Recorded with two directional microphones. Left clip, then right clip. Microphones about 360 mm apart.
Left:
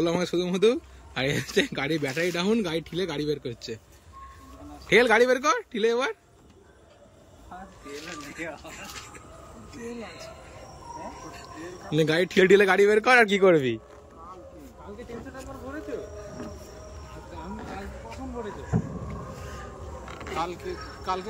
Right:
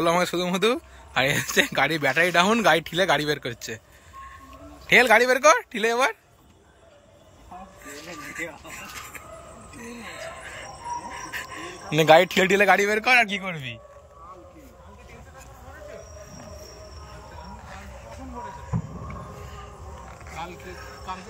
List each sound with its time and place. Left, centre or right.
0.0 s speech: centre
4.8 s speech: centre
8.4 s speech: centre
11.4 s speech: centre
19.5 s a sound: centre